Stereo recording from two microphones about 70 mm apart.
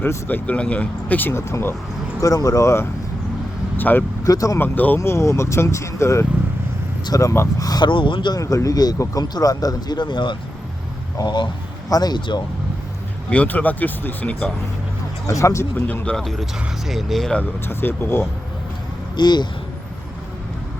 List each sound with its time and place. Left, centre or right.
0.3 s speech: left
1.3 s speech: left
2.2 s speech: left
3.8 s speech: left
4.2 s speech: left
4.5 s speech: left
4.9 s speech: left
8.4 s speech: left
11.2 s speech: left
13.3 s speech: left
15.3 s speech: left
16.1 s speech: centre
17.7 s speech: left
19.1 s speech: left